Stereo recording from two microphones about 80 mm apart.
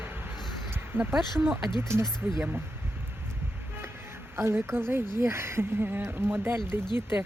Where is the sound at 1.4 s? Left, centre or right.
Centre.